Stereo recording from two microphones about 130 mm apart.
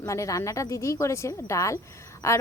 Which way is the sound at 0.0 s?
25° left (ahead or behind).